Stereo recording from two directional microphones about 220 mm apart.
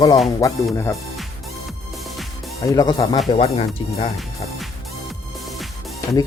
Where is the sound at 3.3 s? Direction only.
25° left (ahead or behind).